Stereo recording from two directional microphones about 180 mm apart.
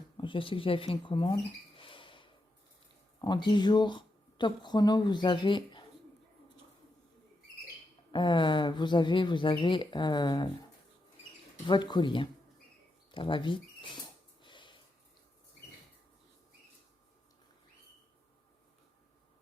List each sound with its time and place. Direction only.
0.2 s speech: 30° left (ahead or behind)
8.1 s speech: 25° left (ahead or behind)
11.6 s speech: 25° left (ahead or behind)
14.4 s a sound: 25° left (ahead or behind)